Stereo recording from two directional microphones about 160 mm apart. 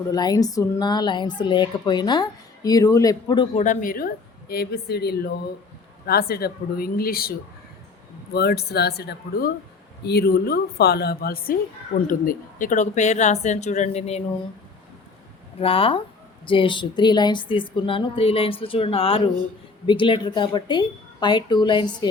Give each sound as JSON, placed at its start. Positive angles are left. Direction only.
{"t": 0.1, "sound": "speech", "side_deg": 25}
{"t": 3.6, "sound": "a woman's voice", "side_deg": 55}
{"t": 6.1, "sound": "a woman's voice", "side_deg": 75}
{"t": 8.3, "sound": "a woman's voice", "side_deg": 85}
{"t": 15.6, "sound": "speech", "side_deg": 35}